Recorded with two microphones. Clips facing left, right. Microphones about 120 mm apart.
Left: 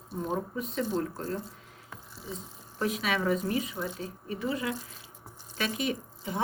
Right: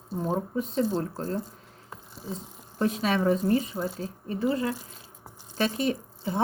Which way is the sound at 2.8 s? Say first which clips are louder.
Right 4 dB; 30° right (ahead or behind).